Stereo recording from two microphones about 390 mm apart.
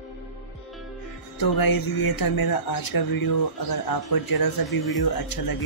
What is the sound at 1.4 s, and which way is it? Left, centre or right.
Speech, left.